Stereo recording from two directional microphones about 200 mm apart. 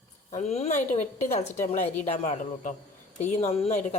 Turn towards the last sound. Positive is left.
turn(degrees=35)  # may be behind; listen again after turning